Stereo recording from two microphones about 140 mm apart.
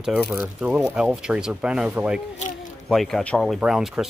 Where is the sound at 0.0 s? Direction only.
5° right (ahead or behind).